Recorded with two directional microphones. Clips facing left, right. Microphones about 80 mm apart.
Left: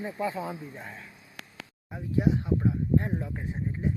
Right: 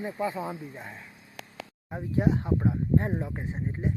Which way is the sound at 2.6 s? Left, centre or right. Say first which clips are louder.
Right 1 dB; right.